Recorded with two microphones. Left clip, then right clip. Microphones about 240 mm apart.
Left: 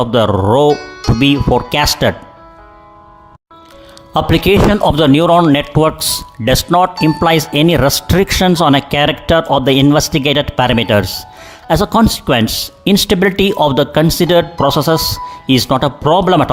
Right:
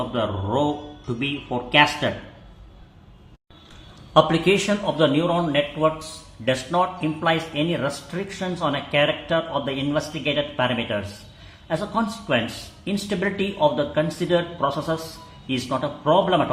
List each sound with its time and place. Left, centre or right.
0.1 s speech: left
4.1 s speech: left